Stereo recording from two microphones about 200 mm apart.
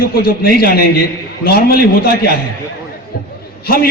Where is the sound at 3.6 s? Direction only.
50° left (ahead or behind).